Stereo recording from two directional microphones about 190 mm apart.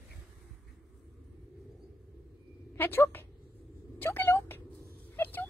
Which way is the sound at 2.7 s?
10° left (ahead or behind).